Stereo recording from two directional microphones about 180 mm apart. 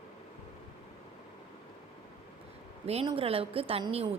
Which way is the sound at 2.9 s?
35° right (ahead or behind).